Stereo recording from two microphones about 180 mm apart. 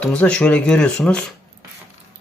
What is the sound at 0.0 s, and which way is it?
Speech, 5° left (ahead or behind).